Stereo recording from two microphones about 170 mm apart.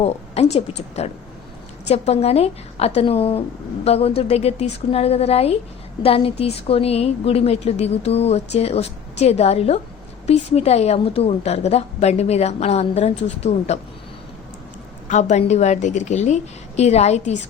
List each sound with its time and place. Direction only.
0.0 s a woman's voice: 40° left (ahead or behind)
15.0 s a woman's voice: 45° left (ahead or behind)